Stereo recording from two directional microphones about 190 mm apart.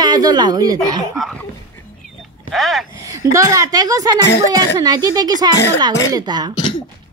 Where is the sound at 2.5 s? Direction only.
Centre (ahead or behind).